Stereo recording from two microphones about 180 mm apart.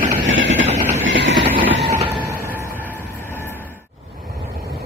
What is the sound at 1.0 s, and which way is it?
Train, 90° right.